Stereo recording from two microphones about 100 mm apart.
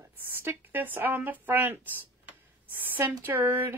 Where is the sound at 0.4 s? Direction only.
20° right (ahead or behind).